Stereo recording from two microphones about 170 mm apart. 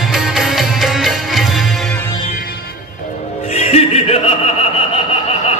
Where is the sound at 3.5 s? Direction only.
40° left (ahead or behind).